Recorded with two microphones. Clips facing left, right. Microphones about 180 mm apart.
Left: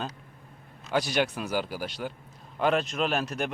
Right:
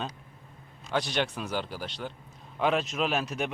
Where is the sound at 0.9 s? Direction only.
5° left (ahead or behind).